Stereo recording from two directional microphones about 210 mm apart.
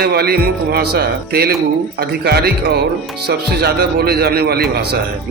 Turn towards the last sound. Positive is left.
turn(degrees=-50)  # may be behind; listen again after turning